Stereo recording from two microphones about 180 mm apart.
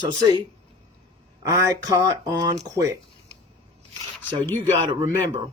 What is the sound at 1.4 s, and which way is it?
Speech, 15° right (ahead or behind).